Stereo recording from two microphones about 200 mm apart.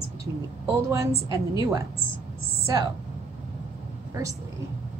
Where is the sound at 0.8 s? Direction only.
15° right (ahead or behind).